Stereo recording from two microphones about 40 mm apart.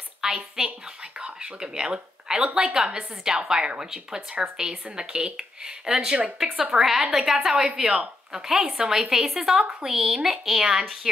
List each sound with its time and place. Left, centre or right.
0.2 s a woman's voice: centre